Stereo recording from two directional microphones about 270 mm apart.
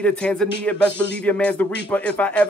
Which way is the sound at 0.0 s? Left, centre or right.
Centre.